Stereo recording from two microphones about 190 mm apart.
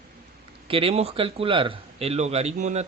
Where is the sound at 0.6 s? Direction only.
30° right (ahead or behind).